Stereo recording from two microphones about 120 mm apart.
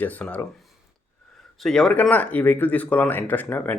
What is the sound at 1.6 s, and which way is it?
Speech, 5° left (ahead or behind).